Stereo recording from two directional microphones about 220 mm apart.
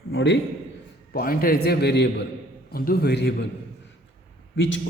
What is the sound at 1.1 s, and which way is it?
A man's voice, 40° left (ahead or behind).